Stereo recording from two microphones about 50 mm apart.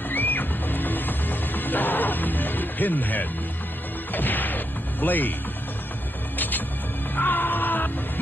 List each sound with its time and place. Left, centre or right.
0.1 s music: left
4.1 s smash: left
6.3 s music: left